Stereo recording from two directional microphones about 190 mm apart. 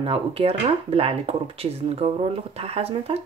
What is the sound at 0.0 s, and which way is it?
Speech, 30° right (ahead or behind).